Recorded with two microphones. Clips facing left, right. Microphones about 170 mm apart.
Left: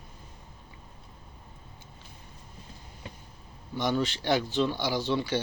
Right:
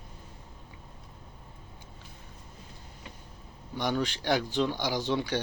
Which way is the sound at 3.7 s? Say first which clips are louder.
Left 2 dB; 15° right (ahead or behind).